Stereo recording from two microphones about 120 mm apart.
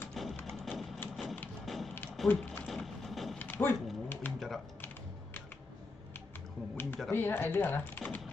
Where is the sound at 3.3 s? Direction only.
15° left (ahead or behind).